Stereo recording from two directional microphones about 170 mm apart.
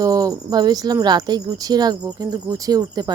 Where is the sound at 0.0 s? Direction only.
20° right (ahead or behind).